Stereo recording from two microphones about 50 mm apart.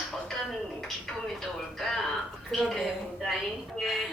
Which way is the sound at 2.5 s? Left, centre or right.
Centre.